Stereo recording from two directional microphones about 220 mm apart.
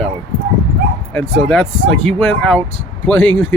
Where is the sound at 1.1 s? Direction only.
Centre (ahead or behind).